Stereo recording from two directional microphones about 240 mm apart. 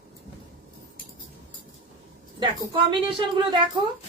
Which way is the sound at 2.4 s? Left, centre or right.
Right.